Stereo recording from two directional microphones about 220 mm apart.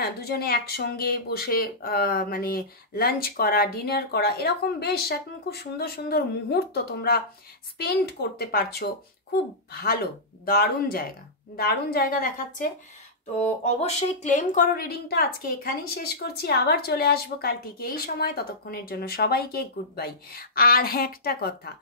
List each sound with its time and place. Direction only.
0.0 s a woman's voice: 45° left (ahead or behind)